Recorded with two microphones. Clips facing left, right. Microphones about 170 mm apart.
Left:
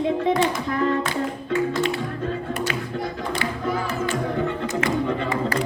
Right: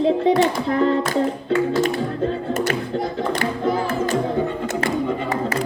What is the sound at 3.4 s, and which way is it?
Music, 40° right (ahead or behind).